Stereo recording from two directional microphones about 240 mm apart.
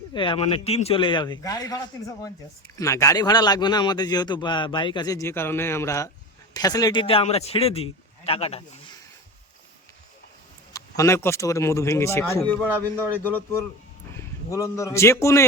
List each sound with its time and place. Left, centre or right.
0.1 s a man's voice: centre
10.7 s a man's voice: centre